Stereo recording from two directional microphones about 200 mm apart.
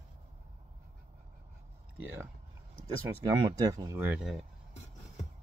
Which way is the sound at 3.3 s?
20° right (ahead or behind).